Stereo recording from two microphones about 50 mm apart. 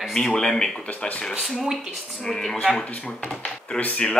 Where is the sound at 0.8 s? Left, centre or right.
Left.